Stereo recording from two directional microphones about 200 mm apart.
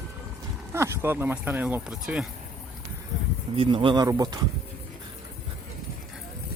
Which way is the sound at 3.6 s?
25° right (ahead or behind).